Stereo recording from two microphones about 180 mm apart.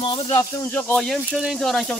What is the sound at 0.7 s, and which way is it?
Speech, 10° left (ahead or behind).